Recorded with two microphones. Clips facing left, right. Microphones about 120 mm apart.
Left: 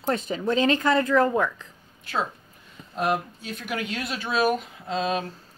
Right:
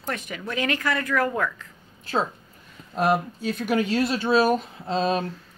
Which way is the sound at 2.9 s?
40° right (ahead or behind).